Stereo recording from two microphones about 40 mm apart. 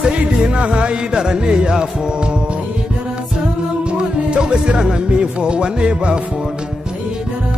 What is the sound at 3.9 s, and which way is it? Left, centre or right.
Music, right.